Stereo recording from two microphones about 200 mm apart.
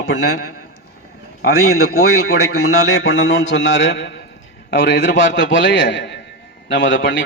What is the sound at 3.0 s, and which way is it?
A man's voice, 80° left.